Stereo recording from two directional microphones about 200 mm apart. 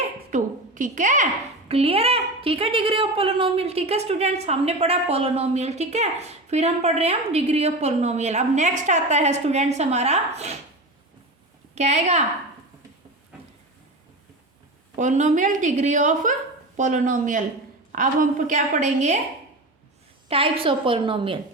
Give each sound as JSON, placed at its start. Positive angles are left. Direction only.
{"t": 0.3, "sound": "a woman's voice", "side_deg": -40}
{"t": 11.7, "sound": "a woman's voice", "side_deg": -35}
{"t": 14.9, "sound": "a woman's voice", "side_deg": -35}
{"t": 20.2, "sound": "a woman's voice", "side_deg": -30}